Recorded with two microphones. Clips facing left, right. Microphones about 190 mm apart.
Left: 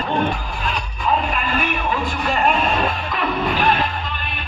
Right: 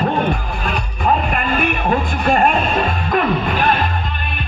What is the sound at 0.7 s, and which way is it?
Music, 55° right (ahead or behind).